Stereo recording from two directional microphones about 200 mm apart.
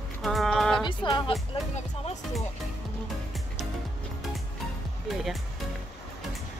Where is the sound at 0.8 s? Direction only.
25° left (ahead or behind).